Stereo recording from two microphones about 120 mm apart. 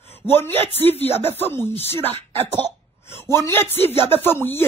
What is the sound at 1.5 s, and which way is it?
Speech, 20° left (ahead or behind).